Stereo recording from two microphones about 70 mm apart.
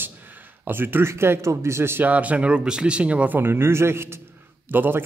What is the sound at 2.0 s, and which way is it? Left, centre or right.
Speech, right.